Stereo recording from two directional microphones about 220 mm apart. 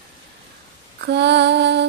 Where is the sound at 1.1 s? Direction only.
50° right (ahead or behind).